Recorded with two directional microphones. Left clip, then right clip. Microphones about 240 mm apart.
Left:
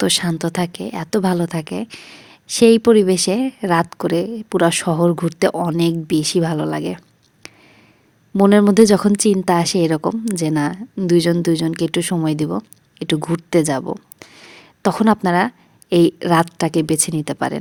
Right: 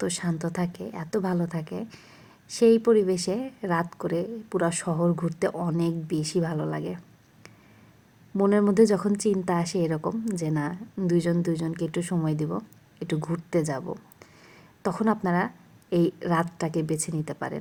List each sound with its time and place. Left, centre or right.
0.3 s a woman's voice: left
7.4 s a sound: left
8.4 s speech: left
8.7 s a woman's voice: left